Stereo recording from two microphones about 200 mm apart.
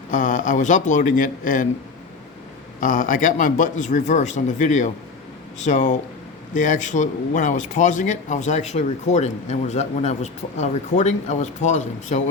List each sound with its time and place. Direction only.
0.1 s a man's voice: 40° left (ahead or behind)
2.8 s a man's voice: 40° left (ahead or behind)